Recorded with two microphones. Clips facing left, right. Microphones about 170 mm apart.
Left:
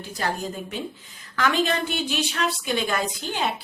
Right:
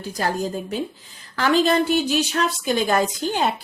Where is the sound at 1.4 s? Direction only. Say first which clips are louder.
Right 5 dB; 35° right (ahead or behind).